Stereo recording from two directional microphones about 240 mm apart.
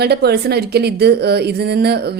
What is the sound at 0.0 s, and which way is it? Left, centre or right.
A woman's voice, right.